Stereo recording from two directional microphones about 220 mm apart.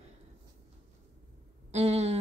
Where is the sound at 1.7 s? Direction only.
30° right (ahead or behind).